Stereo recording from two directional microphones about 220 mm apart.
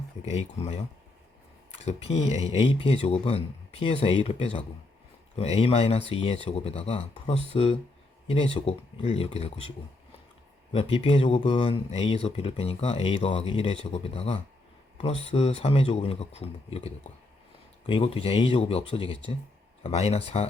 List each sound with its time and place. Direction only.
0.3 s speech: 30° left (ahead or behind)
10.7 s speech: 25° left (ahead or behind)